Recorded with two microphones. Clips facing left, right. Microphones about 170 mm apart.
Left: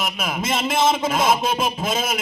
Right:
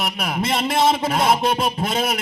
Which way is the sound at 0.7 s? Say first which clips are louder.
Even; 60° right (ahead or behind).